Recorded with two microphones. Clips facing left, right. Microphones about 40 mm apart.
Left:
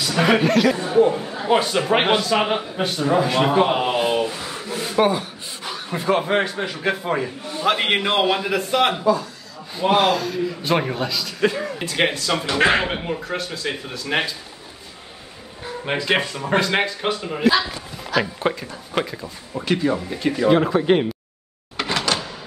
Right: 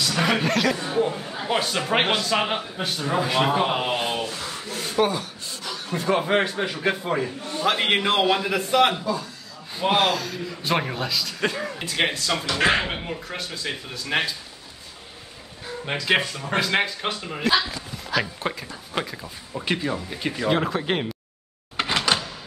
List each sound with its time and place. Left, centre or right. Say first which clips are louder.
0.0 s a man's voice: left 4 dB; centre
4.2 s rub: left 5 dB; centre
4.9 s chuckle: left 4 dB; centre
6.1 s a man's voice: left 1 dB; centre
15.8 s speech: left 2 dB; centre
16.5 s a man's voice: left 3 dB; centre
19.8 s a man's voice: left 6 dB; centre
21.8 s door: left 1 dB; centre